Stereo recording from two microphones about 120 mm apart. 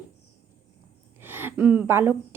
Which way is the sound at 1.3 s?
20° right (ahead or behind).